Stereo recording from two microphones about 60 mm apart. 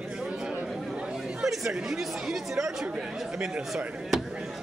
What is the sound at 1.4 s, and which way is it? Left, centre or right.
Speech, centre.